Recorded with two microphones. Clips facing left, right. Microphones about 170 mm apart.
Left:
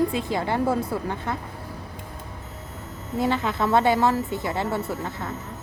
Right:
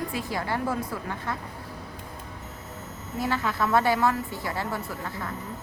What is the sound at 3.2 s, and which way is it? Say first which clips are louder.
A woman's voice: left 3 dB; 20° left (ahead or behind).